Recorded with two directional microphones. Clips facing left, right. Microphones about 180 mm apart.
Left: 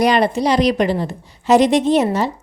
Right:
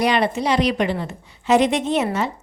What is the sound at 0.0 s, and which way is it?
A woman's voice, 40° left (ahead or behind).